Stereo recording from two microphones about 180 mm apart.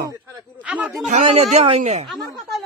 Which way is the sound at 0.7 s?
5° right (ahead or behind).